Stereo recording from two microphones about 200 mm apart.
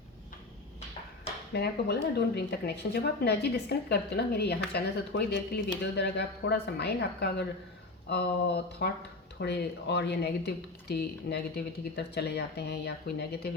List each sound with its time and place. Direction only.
1.5 s speech: 55° left (ahead or behind)